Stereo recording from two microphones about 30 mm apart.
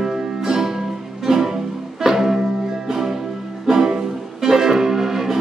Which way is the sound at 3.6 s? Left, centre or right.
Centre.